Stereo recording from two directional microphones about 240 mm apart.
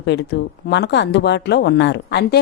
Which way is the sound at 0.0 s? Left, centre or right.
Left.